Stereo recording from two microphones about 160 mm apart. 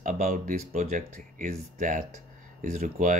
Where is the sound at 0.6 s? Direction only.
45° right (ahead or behind).